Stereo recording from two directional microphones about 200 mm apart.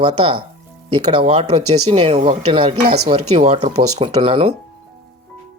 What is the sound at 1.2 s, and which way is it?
Speech, 30° right (ahead or behind).